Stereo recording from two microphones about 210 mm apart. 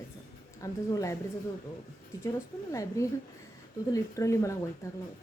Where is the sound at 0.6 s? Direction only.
15° left (ahead or behind).